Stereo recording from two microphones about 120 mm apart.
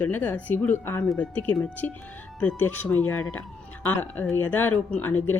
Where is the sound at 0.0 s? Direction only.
15° left (ahead or behind).